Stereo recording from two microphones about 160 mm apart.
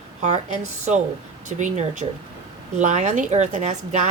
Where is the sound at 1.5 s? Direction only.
50° right (ahead or behind).